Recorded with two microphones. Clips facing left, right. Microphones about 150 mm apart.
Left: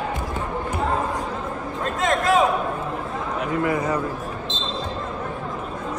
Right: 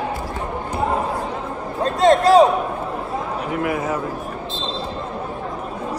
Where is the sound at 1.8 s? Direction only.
35° right (ahead or behind).